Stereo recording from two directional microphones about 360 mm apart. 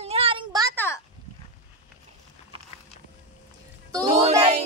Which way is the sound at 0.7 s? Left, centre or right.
Centre.